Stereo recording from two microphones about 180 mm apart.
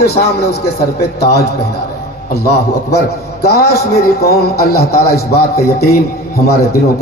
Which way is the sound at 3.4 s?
60° left (ahead or behind).